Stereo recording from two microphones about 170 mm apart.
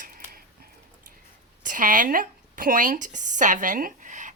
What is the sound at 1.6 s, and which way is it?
A woman's voice, 50° right (ahead or behind).